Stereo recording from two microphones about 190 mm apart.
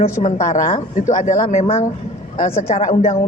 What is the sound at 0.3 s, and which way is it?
Speech, 35° left (ahead or behind).